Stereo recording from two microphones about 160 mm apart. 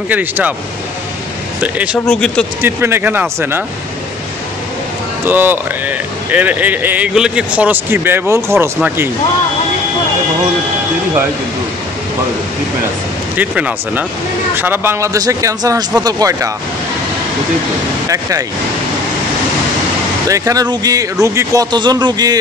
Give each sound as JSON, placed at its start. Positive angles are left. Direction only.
{"t": 0.1, "sound": "speech", "side_deg": -10}
{"t": 1.6, "sound": "speech", "side_deg": -10}
{"t": 2.0, "sound": "speech", "side_deg": 5}
{"t": 2.6, "sound": "speech", "side_deg": -15}
{"t": 5.2, "sound": "speech", "side_deg": -10}
{"t": 13.4, "sound": "speech", "side_deg": -10}
{"t": 18.0, "sound": "speech", "side_deg": -20}
{"t": 20.2, "sound": "speech", "side_deg": -20}